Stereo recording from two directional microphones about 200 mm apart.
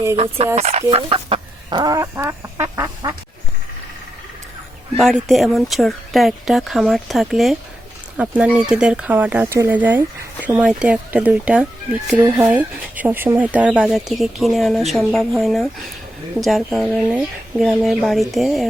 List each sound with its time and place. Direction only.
0.5 s speech: 30° right (ahead or behind); by 3.2 s 15° right (ahead or behind)
4.9 s speech: centre (ahead or behind)